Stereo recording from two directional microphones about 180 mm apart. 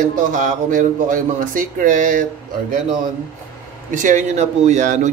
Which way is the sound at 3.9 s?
45° right (ahead or behind).